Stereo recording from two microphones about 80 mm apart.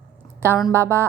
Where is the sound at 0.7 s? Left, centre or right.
Right.